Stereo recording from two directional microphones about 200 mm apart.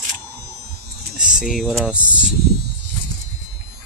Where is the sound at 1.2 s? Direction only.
5° right (ahead or behind).